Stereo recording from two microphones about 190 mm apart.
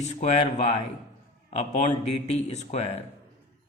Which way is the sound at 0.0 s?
35° left (ahead or behind).